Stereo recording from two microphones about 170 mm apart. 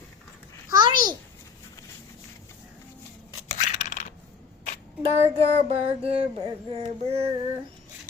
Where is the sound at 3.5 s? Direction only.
45° left (ahead or behind).